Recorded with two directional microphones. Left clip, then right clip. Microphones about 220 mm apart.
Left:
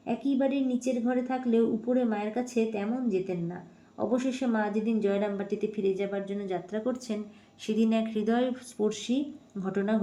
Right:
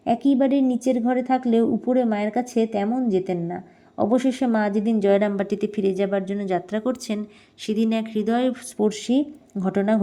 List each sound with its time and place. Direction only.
0.0 s speech: 40° right (ahead or behind)